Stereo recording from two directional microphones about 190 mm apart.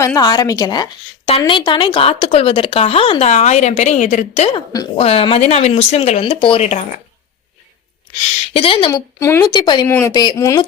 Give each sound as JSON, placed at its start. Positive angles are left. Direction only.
{"t": 0.0, "sound": "a woman's voice", "side_deg": 20}
{"t": 4.5, "sound": "a woman's voice", "side_deg": 20}
{"t": 4.9, "sound": "speech", "side_deg": 30}
{"t": 8.5, "sound": "a woman's voice", "side_deg": 30}
{"t": 8.9, "sound": "a woman's voice", "side_deg": 15}